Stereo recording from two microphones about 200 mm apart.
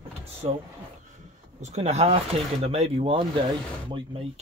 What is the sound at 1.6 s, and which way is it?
Speech, 35° right (ahead or behind).